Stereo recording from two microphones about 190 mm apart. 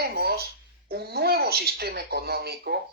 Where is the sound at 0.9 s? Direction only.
55° right (ahead or behind).